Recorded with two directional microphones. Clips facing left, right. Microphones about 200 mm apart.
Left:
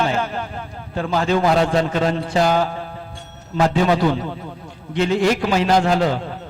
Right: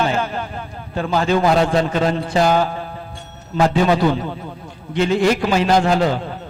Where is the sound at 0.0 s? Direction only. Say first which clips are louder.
Right 1 dB; 10° right (ahead or behind).